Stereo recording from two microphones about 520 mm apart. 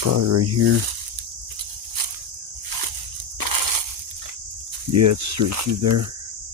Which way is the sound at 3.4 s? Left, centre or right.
Right.